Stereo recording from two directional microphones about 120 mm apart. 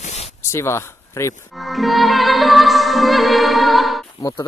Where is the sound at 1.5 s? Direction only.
Centre (ahead or behind).